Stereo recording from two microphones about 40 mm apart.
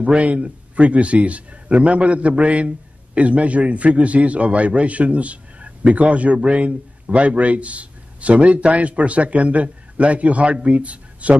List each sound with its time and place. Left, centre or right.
0.0 s a man's voice: right